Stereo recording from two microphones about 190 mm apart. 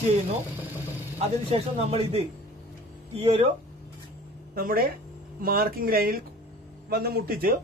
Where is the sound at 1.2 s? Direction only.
30° right (ahead or behind).